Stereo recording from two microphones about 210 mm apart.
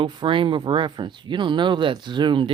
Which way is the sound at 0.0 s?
25° right (ahead or behind).